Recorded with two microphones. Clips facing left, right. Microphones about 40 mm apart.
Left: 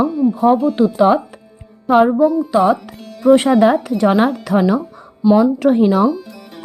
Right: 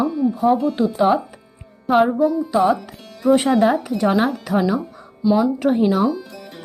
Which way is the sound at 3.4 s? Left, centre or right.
Left.